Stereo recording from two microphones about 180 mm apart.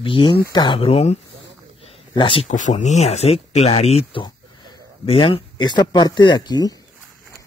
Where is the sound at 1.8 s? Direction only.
30° left (ahead or behind).